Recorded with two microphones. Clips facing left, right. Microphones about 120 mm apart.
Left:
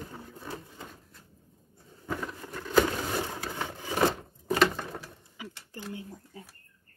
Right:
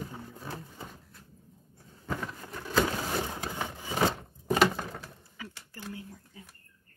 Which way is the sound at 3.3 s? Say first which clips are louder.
Even; 15° right (ahead or behind).